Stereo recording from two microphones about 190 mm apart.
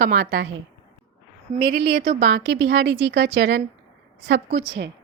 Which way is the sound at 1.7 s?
60° right (ahead or behind).